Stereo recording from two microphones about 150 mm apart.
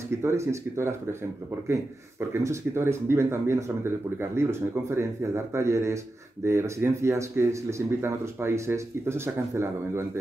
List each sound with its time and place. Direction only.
0.1 s speech: 20° right (ahead or behind)